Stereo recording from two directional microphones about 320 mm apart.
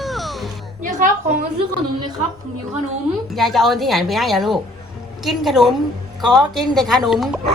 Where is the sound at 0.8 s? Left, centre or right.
Right.